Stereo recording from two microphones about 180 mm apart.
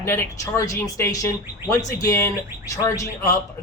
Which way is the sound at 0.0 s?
15° left (ahead or behind).